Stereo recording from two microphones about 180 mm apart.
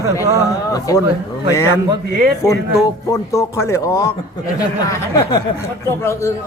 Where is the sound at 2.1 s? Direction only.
60° right (ahead or behind).